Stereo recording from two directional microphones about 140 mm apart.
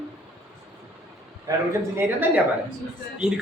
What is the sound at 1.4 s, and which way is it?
Speech, 20° right (ahead or behind).